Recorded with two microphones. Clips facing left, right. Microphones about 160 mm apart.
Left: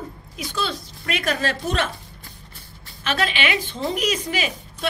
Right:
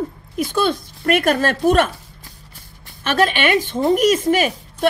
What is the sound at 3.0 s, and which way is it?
A woman's voice, 50° right (ahead or behind).